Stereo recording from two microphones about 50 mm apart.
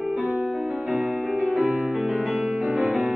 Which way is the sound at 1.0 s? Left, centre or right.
Right.